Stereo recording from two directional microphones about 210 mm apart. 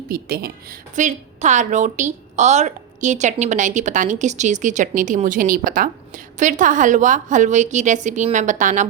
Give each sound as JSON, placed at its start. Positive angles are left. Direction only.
{"t": 0.1, "sound": "a woman's voice", "side_deg": -45}